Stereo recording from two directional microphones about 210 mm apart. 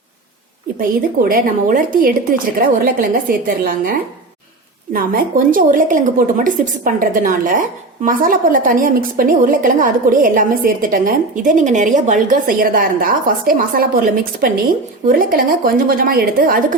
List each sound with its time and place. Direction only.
0.8 s speech: 45° right (ahead or behind)
4.9 s a woman's voice: 40° right (ahead or behind)